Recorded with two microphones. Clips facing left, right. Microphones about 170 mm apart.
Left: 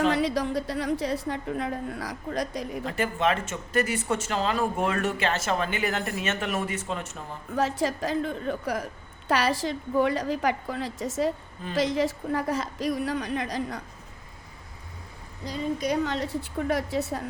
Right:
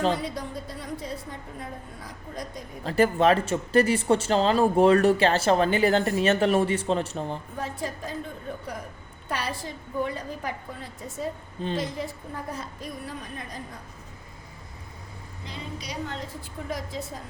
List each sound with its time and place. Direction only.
0.1 s a woman's voice: 80° left
2.8 s speech: 35° right (ahead or behind)
7.5 s a woman's voice: 90° left
15.4 s a woman's voice: 45° left (ahead or behind)
16.0 s a woman's voice: 75° left (ahead or behind)